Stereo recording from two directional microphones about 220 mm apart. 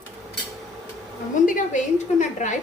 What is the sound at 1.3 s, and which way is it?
A woman's voice, 35° left (ahead or behind).